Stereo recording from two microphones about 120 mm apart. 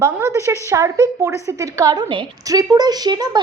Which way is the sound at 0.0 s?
25° right (ahead or behind).